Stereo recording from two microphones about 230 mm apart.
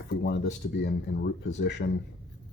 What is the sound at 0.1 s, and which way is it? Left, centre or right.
Speech, left.